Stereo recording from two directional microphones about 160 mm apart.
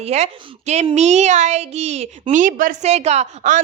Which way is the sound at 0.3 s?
30° right (ahead or behind).